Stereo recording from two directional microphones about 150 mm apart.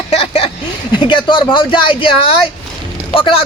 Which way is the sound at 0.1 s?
40° left (ahead or behind).